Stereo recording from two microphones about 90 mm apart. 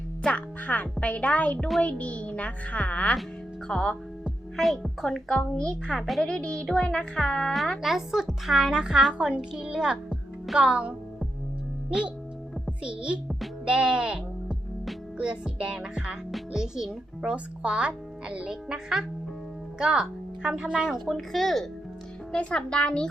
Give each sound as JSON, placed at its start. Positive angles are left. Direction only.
{"t": 0.2, "sound": "speech", "side_deg": 15}
{"t": 1.5, "sound": "a woman's voice", "side_deg": 0}
{"t": 1.8, "sound": "a woman's voice", "side_deg": 15}
{"t": 7.8, "sound": "speech", "side_deg": -5}
{"t": 14.8, "sound": "music", "side_deg": -10}
{"t": 19.8, "sound": "a woman's voice", "side_deg": -5}
{"t": 22.3, "sound": "speech", "side_deg": 15}